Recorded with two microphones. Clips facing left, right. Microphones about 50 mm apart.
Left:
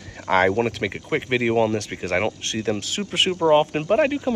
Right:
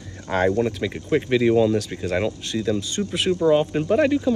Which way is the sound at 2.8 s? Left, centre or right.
Left.